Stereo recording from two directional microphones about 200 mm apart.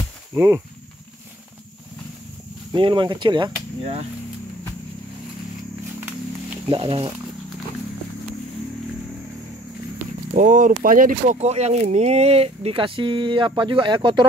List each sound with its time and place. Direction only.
0.3 s speech: 15° right (ahead or behind)
2.7 s speech: 25° right (ahead or behind)
6.7 s speech: 25° right (ahead or behind)
10.3 s speech: 40° right (ahead or behind); by 14.2 s 25° right (ahead or behind)